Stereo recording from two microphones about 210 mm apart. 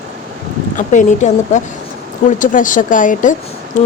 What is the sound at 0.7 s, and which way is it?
A woman's voice, 35° left (ahead or behind).